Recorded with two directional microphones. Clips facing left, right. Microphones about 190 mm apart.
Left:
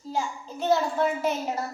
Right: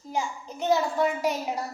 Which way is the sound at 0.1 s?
15° right (ahead or behind).